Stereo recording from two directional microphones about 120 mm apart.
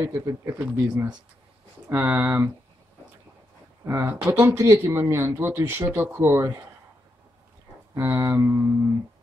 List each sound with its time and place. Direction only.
0.0 s speech: 25° right (ahead or behind)
1.9 s speech: 20° right (ahead or behind)
3.8 s speech: 20° right (ahead or behind)
7.9 s speech: 25° right (ahead or behind)